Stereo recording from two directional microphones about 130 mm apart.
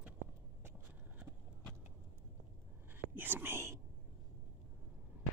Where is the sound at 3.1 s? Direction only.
15° right (ahead or behind).